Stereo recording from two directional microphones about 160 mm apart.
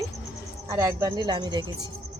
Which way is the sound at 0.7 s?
20° right (ahead or behind).